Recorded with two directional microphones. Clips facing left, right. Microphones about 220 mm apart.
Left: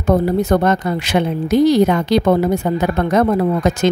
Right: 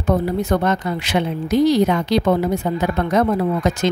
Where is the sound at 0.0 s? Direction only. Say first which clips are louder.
Left 4 dB; 45° left (ahead or behind).